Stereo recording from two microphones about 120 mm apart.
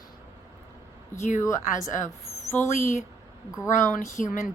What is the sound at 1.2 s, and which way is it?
Speech, 90° left.